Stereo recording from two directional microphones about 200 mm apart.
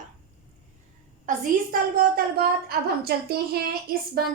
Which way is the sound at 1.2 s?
45° right (ahead or behind).